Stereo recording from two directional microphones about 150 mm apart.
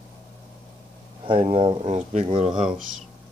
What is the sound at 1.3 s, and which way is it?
Speech, 35° right (ahead or behind).